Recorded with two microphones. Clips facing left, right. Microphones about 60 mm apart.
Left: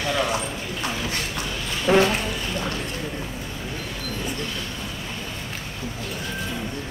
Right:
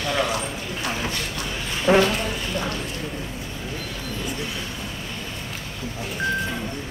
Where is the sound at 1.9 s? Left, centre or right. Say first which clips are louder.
Right 1 dB; right.